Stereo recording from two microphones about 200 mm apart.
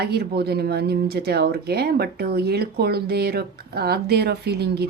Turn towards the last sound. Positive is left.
turn(degrees=-55)  # may be behind; listen again after turning